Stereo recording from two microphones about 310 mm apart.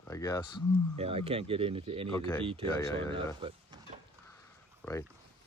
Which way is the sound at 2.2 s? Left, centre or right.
Centre.